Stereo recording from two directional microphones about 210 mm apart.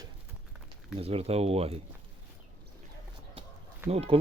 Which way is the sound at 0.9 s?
30° right (ahead or behind).